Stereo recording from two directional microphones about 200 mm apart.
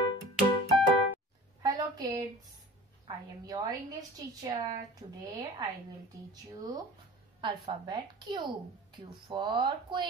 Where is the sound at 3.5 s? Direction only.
20° right (ahead or behind).